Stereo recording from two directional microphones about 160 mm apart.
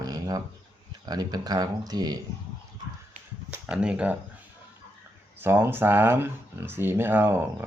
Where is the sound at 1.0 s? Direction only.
25° right (ahead or behind).